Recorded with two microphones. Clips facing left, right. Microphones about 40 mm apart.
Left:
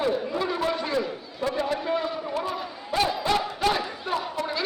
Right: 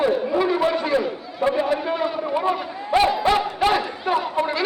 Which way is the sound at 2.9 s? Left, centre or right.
Right.